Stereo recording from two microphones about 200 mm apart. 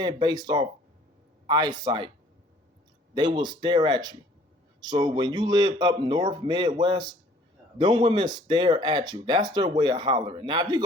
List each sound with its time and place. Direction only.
0.0 s speech: 20° right (ahead or behind)
3.2 s speech: 20° right (ahead or behind)